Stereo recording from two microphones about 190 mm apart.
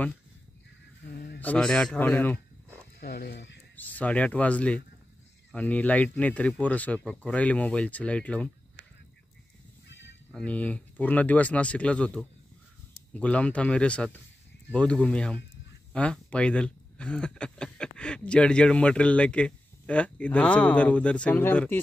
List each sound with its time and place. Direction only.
1.1 s a sound: 55° left (ahead or behind)
1.4 s speech: 5° left (ahead or behind)
3.0 s speech: 60° left (ahead or behind)
3.7 s speech: 10° left (ahead or behind)
9.8 s music: 70° left (ahead or behind)
10.3 s speech: 5° left (ahead or behind)